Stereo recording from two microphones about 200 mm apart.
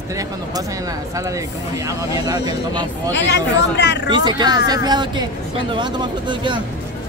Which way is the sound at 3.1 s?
60° left (ahead or behind).